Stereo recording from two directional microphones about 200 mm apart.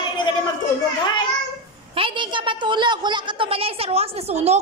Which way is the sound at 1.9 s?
25° right (ahead or behind).